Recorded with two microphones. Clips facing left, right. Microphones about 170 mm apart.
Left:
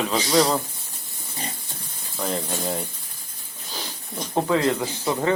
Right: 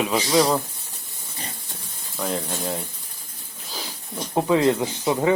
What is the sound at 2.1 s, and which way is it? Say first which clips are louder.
Speech: even; centre (ahead or behind).